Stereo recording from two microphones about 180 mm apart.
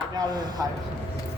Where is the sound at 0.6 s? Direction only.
20° right (ahead or behind).